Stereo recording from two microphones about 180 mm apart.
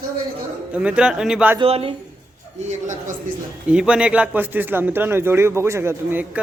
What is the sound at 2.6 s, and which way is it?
Speech, 40° right (ahead or behind).